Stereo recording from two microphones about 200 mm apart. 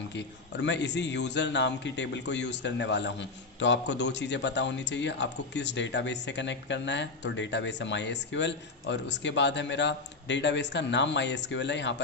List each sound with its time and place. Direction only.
0.1 s a man's voice: 60° left (ahead or behind)